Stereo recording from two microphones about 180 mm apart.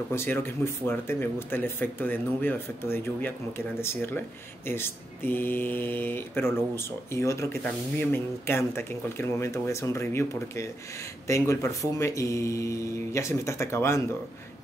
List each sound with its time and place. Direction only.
0.1 s speech: 15° left (ahead or behind)